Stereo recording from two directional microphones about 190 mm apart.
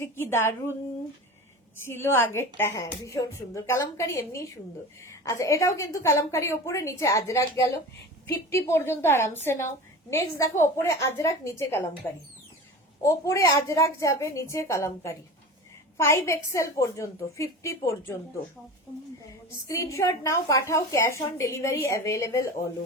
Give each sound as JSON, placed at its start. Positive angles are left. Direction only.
{"t": 0.0, "sound": "a woman's voice", "side_deg": 10}
{"t": 1.8, "sound": "a woman's voice", "side_deg": 10}
{"t": 13.0, "sound": "a woman's voice", "side_deg": 15}
{"t": 19.6, "sound": "a woman's voice", "side_deg": 15}